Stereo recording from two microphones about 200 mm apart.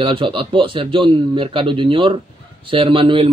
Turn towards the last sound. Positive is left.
turn(degrees=-25)  # may be behind; listen again after turning